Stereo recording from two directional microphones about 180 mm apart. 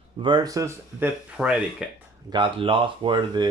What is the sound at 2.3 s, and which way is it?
Speech, 30° right (ahead or behind).